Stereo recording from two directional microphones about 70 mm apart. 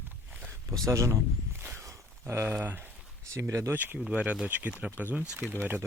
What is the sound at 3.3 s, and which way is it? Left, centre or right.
Speech, right.